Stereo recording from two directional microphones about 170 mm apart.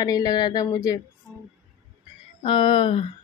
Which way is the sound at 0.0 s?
20° left (ahead or behind).